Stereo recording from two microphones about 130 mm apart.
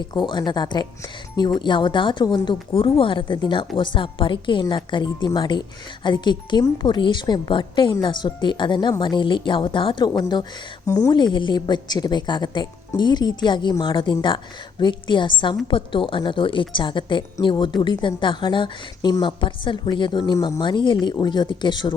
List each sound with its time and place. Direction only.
0.0 s speech: 35° left (ahead or behind)
10.8 s a woman's voice: 25° left (ahead or behind)
11.1 s speech: 35° left (ahead or behind)